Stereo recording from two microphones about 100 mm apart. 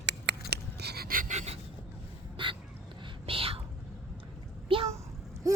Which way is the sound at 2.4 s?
55° right (ahead or behind).